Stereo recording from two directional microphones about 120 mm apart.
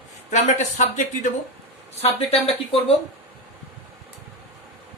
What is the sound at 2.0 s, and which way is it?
Speech, 55° left (ahead or behind).